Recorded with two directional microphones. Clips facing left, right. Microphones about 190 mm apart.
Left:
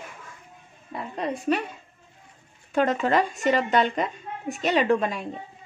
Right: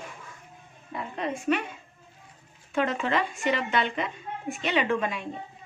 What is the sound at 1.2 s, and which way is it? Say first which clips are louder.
Speech: left 2 dB; 35° left (ahead or behind).